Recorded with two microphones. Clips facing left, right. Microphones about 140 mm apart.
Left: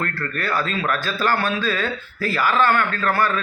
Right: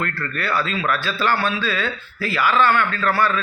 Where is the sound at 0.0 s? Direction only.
40° left (ahead or behind).